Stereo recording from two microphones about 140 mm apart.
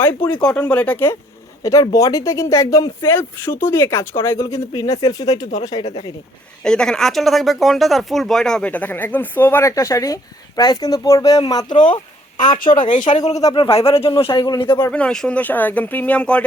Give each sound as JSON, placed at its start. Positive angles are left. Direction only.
{"t": 0.4, "sound": "speech", "side_deg": 10}
{"t": 1.6, "sound": "speech", "side_deg": 25}
{"t": 5.8, "sound": "speech", "side_deg": 50}
{"t": 6.7, "sound": "speech", "side_deg": 5}
{"t": 13.0, "sound": "speech", "side_deg": 60}
{"t": 13.3, "sound": "speech", "side_deg": 30}
{"t": 13.8, "sound": "speech", "side_deg": 45}
{"t": 14.8, "sound": "speech", "side_deg": 10}